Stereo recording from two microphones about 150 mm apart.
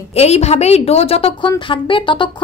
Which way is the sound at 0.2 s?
45° left (ahead or behind).